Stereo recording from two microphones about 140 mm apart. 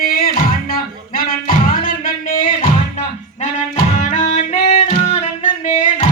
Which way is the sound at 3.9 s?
60° left (ahead or behind).